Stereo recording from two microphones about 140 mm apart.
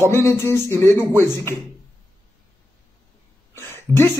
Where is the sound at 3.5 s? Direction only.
15° left (ahead or behind).